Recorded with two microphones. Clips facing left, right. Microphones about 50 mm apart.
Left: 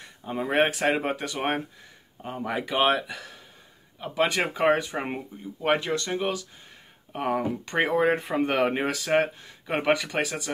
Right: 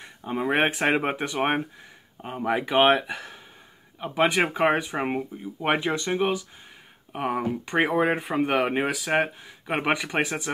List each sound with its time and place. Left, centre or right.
0.0 s speech: centre
7.1 s speech: centre